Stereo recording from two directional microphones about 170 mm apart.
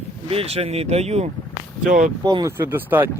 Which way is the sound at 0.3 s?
35° right (ahead or behind).